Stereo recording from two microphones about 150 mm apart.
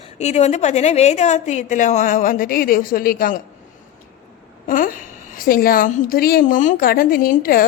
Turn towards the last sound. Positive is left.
turn(degrees=70)  # may be behind; listen again after turning